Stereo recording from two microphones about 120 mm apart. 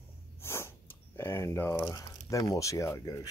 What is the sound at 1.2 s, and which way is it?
Speech, 20° left (ahead or behind).